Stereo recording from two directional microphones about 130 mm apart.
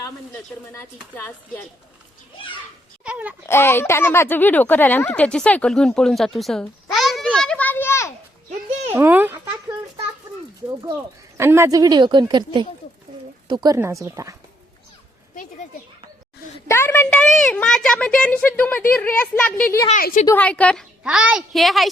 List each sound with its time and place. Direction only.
0.7 s speech: 15° left (ahead or behind)
3.0 s speech: 10° right (ahead or behind)
3.4 s speech: 20° left (ahead or behind); by 6.7 s centre (ahead or behind)
6.9 s a sound: centre (ahead or behind); by 8.1 s 20° left (ahead or behind)
8.9 s a sound: 15° right (ahead or behind)
11.3 s speech: 20° right (ahead or behind)
13.7 s speech: 20° right (ahead or behind)
16.6 s speech: 20° left (ahead or behind)
21.0 s a woman's voice: 5° right (ahead or behind)